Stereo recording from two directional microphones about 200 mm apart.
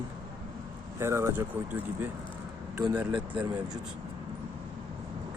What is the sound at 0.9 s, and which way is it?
Speech, 15° right (ahead or behind).